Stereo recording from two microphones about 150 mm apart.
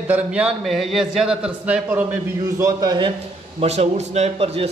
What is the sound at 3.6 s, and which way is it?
A man's voice, 45° right (ahead or behind).